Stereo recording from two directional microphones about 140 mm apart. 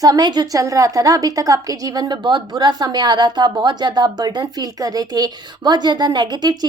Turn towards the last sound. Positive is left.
turn(degrees=-30)  # may be behind; listen again after turning